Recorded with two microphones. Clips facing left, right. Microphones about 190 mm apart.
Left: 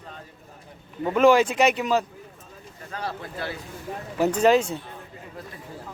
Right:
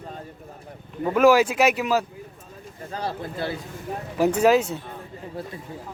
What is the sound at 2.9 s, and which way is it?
Speech, 30° right (ahead or behind).